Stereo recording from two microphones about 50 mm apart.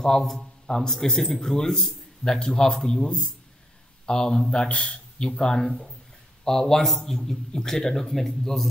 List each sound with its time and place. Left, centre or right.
0.0 s a man's voice: centre